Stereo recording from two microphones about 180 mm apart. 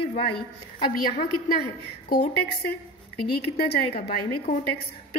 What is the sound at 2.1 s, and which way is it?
Speech, 65° left (ahead or behind).